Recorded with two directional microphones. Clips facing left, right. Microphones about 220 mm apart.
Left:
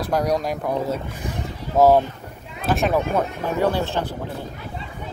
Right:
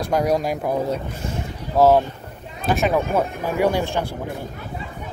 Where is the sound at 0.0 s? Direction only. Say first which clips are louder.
Right 2 dB; centre (ahead or behind).